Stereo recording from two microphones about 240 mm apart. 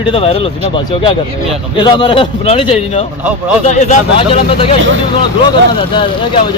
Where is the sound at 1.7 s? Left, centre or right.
Centre.